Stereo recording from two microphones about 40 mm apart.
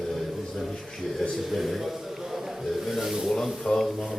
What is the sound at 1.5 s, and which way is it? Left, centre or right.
Speech, centre.